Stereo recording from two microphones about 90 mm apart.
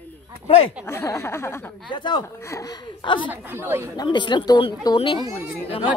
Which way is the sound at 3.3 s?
25° right (ahead or behind).